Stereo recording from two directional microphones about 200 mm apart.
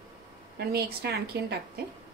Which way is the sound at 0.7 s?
55° right (ahead or behind).